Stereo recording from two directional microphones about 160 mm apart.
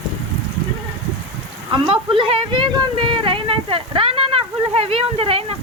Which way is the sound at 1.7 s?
30° right (ahead or behind).